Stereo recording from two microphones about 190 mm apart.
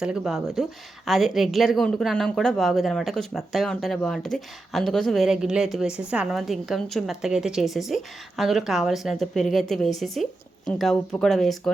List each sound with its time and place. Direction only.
0.0 s speech: 5° right (ahead or behind)